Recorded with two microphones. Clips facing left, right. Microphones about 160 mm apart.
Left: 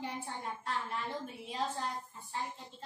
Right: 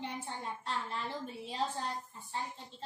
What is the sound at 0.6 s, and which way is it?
Speech, 30° right (ahead or behind).